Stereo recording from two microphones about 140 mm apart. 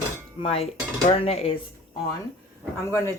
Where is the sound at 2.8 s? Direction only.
20° left (ahead or behind).